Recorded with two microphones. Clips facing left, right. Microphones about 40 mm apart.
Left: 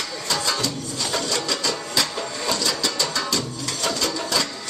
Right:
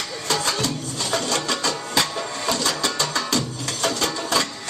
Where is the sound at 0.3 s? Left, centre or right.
Right.